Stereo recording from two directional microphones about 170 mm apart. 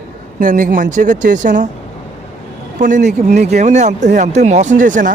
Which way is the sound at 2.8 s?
45° right (ahead or behind).